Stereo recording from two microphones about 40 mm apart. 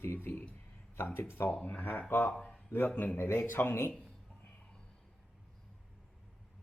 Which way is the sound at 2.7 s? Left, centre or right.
Left.